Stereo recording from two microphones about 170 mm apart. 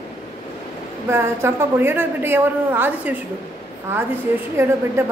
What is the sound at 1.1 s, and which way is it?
A woman's voice, 15° right (ahead or behind).